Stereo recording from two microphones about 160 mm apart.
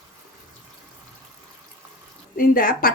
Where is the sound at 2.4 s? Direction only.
65° left (ahead or behind).